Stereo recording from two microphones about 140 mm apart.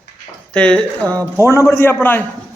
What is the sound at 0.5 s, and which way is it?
Speech, 5° left (ahead or behind).